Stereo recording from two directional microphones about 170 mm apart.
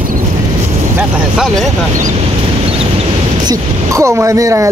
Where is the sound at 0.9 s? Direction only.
5° right (ahead or behind).